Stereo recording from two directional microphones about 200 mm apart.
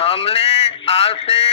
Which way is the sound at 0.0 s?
30° left (ahead or behind).